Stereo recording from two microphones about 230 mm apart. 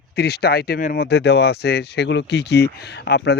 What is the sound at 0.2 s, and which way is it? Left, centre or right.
Speech, left.